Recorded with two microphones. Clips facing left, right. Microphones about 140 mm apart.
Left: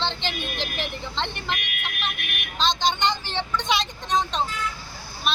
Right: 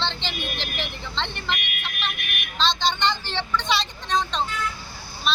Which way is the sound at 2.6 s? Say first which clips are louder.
Even; 45° left (ahead or behind).